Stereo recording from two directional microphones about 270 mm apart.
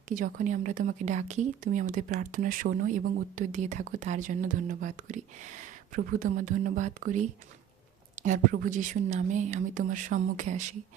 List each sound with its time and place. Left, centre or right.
0.1 s speech: right